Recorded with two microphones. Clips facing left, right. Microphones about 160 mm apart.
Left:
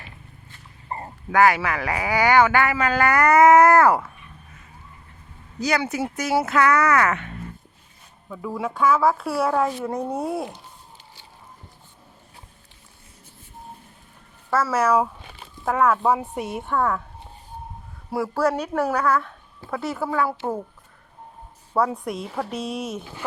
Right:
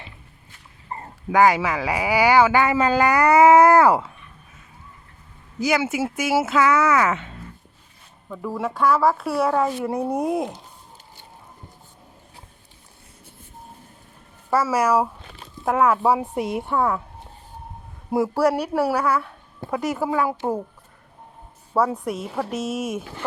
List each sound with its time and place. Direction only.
1.3 s speech: 15° right (ahead or behind)
5.5 s speech: 5° right (ahead or behind)
8.3 s speech: centre (ahead or behind); by 10.6 s 15° right (ahead or behind)
14.5 s speech: 10° right (ahead or behind)
18.1 s speech: 15° right (ahead or behind)
21.7 s speech: centre (ahead or behind)